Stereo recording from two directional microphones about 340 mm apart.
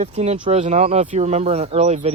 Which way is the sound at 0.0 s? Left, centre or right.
Centre.